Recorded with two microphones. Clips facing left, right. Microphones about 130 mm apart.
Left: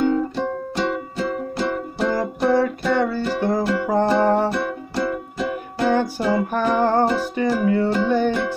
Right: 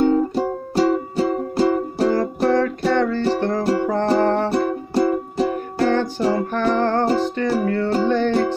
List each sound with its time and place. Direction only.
0.0 s music: 40° right (ahead or behind)
2.1 s music: 10° left (ahead or behind)
4.5 s music: 35° right (ahead or behind)
5.9 s music: 10° left (ahead or behind)